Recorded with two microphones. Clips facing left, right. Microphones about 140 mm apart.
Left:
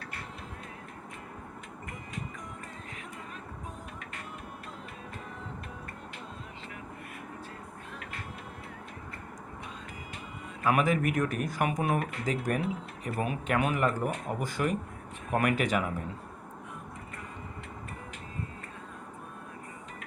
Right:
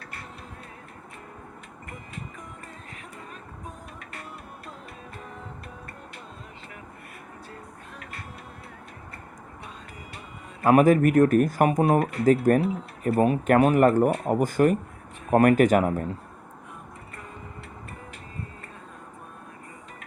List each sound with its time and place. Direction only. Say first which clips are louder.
10.6 s speech: right 9 dB; 40° right (ahead or behind)